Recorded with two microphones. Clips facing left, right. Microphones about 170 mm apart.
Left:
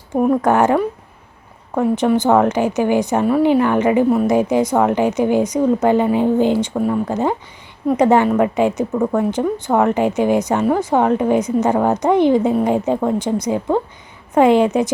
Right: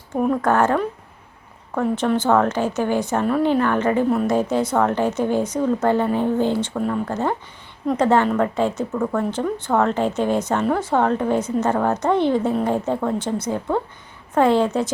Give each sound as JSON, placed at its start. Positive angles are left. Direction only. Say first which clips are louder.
{"t": 0.1, "sound": "a woman's voice", "louder": "left 4 dB", "side_deg": 15}